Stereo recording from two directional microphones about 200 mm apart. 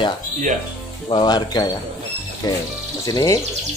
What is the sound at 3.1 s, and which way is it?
Speech, 20° left (ahead or behind).